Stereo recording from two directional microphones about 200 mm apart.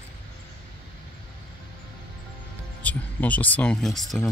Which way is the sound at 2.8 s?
5° left (ahead or behind).